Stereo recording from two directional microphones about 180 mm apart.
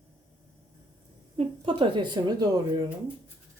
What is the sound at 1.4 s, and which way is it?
Speech, 30° right (ahead or behind).